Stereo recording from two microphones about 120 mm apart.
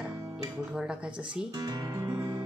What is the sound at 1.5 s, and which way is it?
Music, 30° right (ahead or behind).